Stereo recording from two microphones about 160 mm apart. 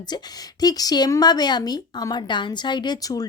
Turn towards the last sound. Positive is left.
turn(degrees=25)  # may be behind; listen again after turning